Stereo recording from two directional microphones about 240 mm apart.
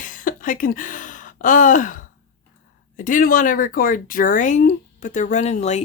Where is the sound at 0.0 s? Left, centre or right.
Left.